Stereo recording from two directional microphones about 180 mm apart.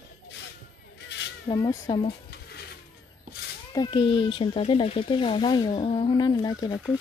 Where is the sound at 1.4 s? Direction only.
20° left (ahead or behind).